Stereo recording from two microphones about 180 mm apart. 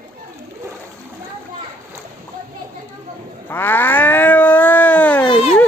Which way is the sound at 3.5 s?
10° left (ahead or behind).